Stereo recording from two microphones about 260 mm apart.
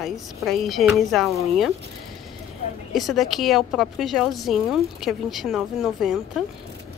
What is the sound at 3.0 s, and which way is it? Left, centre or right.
A woman's voice, centre.